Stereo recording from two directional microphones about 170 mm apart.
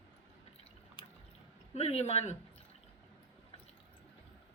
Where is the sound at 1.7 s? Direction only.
40° left (ahead or behind).